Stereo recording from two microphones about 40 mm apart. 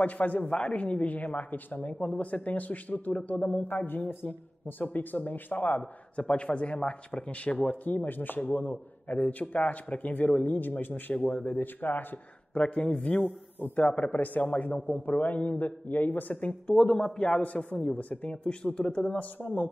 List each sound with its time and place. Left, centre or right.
0.0 s a man's voice: left
2.0 s a man's voice: left
3.6 s a man's voice: left
5.8 s a man's voice: left
7.8 s a man's voice: left
11.1 s a man's voice: left
11.4 s a man's voice: left
12.5 s a man's voice: left
14.5 s a man's voice: left
16.7 s a man's voice: centre
17.4 s a man's voice: left
18.3 s a man's voice: left
19.1 s a man's voice: left